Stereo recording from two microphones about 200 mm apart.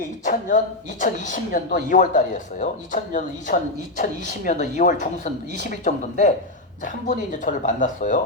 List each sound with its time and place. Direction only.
0.3 s speech: 40° left (ahead or behind)